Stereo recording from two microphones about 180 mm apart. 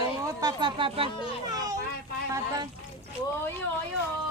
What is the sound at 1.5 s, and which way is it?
Children playing, 20° right (ahead or behind).